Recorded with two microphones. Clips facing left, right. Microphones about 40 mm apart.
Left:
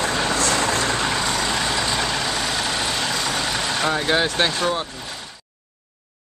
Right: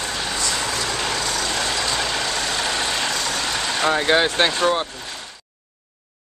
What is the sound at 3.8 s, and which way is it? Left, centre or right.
Speech, centre.